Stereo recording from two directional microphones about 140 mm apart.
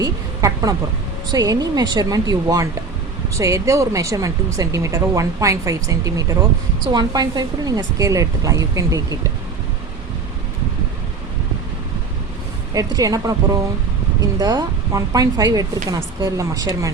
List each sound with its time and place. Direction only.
0.0 s a sound: 25° right (ahead or behind)
1.3 s speech: 25° right (ahead or behind)
12.7 s speech: 25° right (ahead or behind)